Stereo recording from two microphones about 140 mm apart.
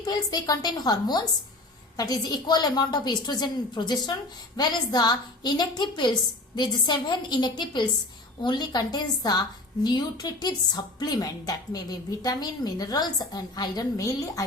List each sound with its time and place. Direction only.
0.0 s a woman's voice: 30° left (ahead or behind)